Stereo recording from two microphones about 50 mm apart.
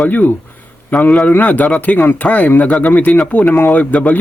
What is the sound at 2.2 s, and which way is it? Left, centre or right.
Speech, left.